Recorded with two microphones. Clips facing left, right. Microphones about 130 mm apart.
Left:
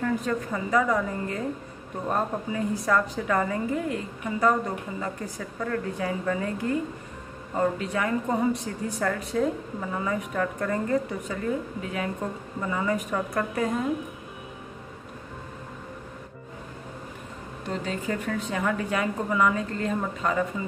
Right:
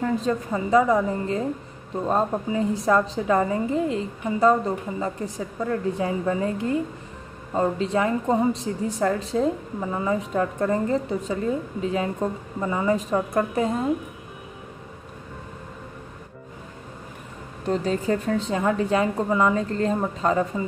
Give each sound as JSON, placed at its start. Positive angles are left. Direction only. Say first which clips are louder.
{"t": 0.0, "sound": "a woman's voice", "louder": "right 3 dB", "side_deg": -25}
{"t": 17.6, "sound": "a woman's voice", "louder": "right 7 dB", "side_deg": -35}